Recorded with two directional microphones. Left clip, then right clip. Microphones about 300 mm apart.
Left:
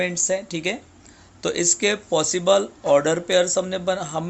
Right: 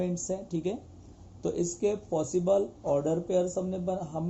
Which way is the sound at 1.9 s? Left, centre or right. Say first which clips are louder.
Left 7 dB; left.